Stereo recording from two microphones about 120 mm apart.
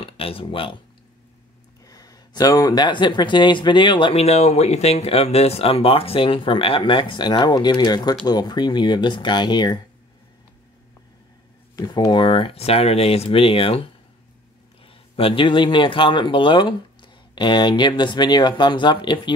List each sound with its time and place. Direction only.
0.0 s speech: 50° left (ahead or behind)
1.9 s speech: 30° left (ahead or behind)
4.2 s speech: 65° left (ahead or behind); by 9.8 s 40° left (ahead or behind)
11.7 s speech: 30° left (ahead or behind); by 13.8 s 50° left (ahead or behind)
14.9 s speech: 50° left (ahead or behind)